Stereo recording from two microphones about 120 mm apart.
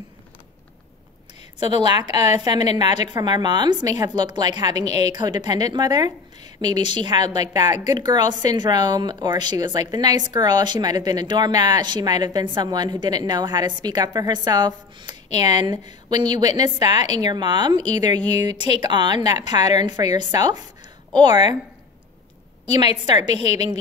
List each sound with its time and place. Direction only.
1.8 s a woman's voice: 35° right (ahead or behind)
23.2 s a woman's voice: 65° left (ahead or behind)